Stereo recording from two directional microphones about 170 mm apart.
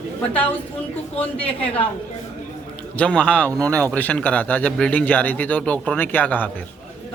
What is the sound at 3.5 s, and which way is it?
Speech, 20° right (ahead or behind).